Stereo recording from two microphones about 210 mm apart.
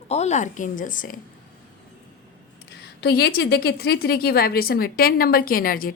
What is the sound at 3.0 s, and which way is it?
A woman's voice, 50° left (ahead or behind).